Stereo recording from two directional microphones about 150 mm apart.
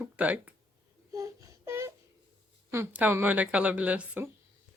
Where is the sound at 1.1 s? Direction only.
20° right (ahead or behind).